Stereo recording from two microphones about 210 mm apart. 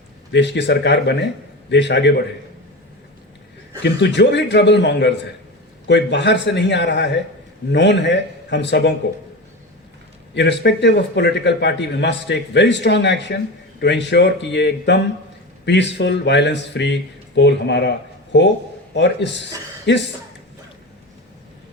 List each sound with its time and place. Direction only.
0.3 s a man's voice: 55° left (ahead or behind)
3.8 s a man's voice: 55° left (ahead or behind)
10.3 s a man's voice: 55° left (ahead or behind)